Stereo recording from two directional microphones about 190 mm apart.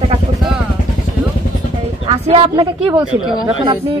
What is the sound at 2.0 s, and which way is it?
Speech, 30° right (ahead or behind).